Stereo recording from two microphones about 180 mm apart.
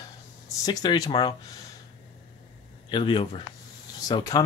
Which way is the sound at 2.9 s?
30° left (ahead or behind).